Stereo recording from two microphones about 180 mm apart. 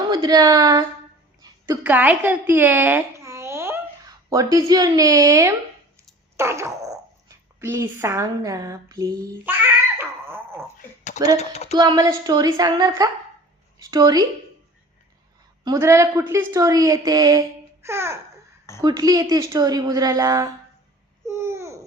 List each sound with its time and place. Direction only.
0.1 s a woman's voice: 20° right (ahead or behind)
6.3 s fart: 15° right (ahead or behind)
7.3 s a woman's voice: 15° right (ahead or behind)
10.0 s dog: 10° right (ahead or behind)
11.3 s a sound: 35° left (ahead or behind)
11.7 s a woman's voice: 20° right (ahead or behind)
15.6 s a woman's voice: 20° right (ahead or behind)
21.2 s babbling: 15° right (ahead or behind)